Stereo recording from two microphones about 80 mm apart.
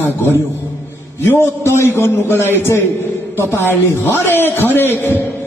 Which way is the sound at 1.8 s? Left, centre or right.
Left.